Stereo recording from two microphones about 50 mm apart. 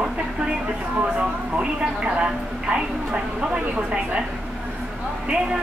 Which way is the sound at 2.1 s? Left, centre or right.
Centre.